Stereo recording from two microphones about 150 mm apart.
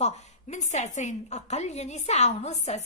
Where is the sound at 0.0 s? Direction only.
50° left (ahead or behind).